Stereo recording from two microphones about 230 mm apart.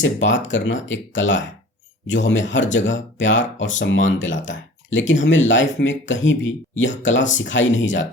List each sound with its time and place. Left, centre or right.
0.0 s speech: left